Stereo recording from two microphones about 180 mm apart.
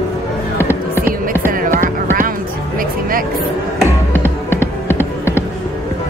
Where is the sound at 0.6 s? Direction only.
15° left (ahead or behind).